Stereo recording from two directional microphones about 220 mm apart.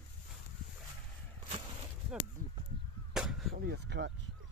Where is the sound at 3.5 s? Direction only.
45° right (ahead or behind).